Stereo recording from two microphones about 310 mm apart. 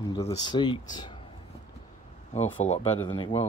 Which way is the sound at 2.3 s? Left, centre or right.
Centre.